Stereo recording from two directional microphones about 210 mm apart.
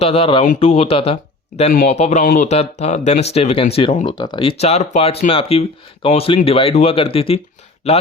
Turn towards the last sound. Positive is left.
turn(degrees=30)  # may be behind; listen again after turning